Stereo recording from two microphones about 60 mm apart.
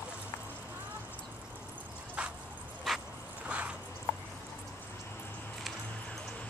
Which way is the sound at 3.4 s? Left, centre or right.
Right.